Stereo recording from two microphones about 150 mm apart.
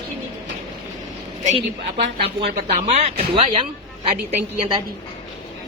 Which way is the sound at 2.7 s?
50° right (ahead or behind).